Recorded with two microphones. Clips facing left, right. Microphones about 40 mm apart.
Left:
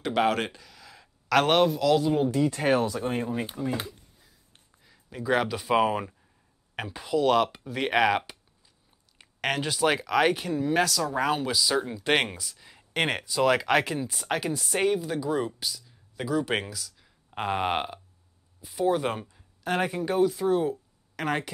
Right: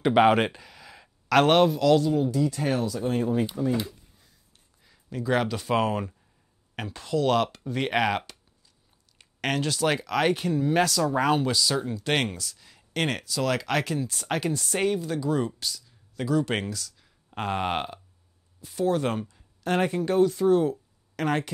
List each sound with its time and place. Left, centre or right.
0.0 s speech: centre
2.2 s speech: left
3.6 s speech: centre
4.8 s speech: centre